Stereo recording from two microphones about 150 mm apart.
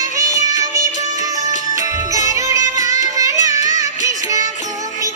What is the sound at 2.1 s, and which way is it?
Music, 20° right (ahead or behind).